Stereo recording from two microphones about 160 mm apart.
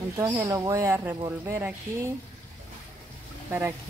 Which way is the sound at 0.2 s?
20° right (ahead or behind).